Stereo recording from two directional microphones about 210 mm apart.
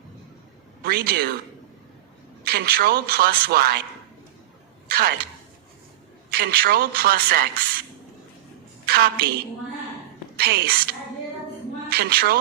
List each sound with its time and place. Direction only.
0.8 s a man's voice: 45° right (ahead or behind)
2.4 s speech: 50° right (ahead or behind)
4.9 s speech: 45° right (ahead or behind)
6.3 s speech: 45° right (ahead or behind)
8.9 s speech: 45° right (ahead or behind)
10.3 s speech: 50° right (ahead or behind)
11.9 s a woman's voice: 50° right (ahead or behind)